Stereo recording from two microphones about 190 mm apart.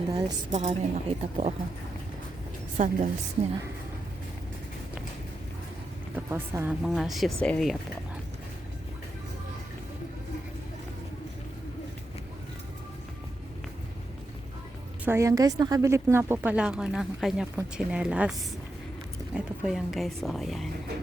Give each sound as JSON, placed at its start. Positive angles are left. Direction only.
{"t": 0.1, "sound": "a woman's voice", "side_deg": -20}
{"t": 0.5, "sound": "a woman's voice", "side_deg": -40}
{"t": 2.7, "sound": "a woman's voice", "side_deg": -40}
{"t": 6.3, "sound": "speech", "side_deg": -10}
{"t": 6.8, "sound": "speech", "side_deg": 0}
{"t": 15.0, "sound": "speech", "side_deg": -15}